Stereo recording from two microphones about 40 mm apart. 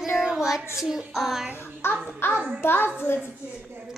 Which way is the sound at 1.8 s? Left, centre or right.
Left.